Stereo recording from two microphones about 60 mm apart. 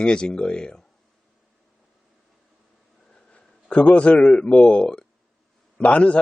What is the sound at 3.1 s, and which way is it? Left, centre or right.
A man's voice, centre.